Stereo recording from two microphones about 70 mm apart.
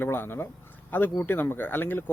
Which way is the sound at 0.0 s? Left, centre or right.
Left.